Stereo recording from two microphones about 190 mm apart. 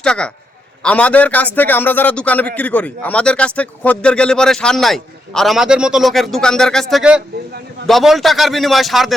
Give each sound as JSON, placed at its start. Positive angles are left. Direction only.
{"t": 0.0, "sound": "a man's voice", "side_deg": 5}